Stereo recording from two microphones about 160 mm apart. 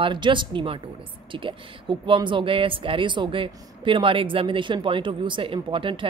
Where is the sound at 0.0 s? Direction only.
30° right (ahead or behind).